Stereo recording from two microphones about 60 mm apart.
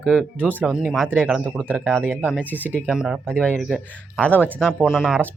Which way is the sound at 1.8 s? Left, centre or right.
Right.